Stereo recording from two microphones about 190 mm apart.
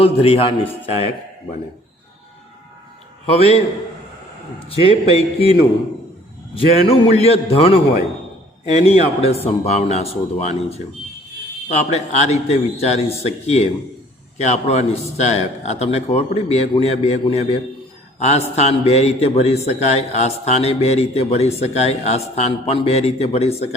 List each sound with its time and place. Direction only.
0.0 s a man's voice: 30° left (ahead or behind)
3.2 s a man's voice: 35° left (ahead or behind)
4.7 s a man's voice: 30° left (ahead or behind)
8.8 s a man's voice: 35° left (ahead or behind)